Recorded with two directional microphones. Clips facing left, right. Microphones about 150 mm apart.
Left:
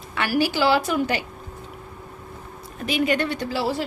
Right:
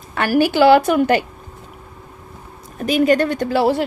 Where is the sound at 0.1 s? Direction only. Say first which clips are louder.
Right 6 dB; 45° right (ahead or behind).